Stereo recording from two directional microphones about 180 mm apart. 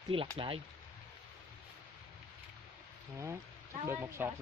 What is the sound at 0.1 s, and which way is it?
Speech, 30° right (ahead or behind).